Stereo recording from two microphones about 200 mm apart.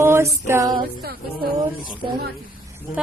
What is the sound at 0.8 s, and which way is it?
Female singing, 50° right (ahead or behind).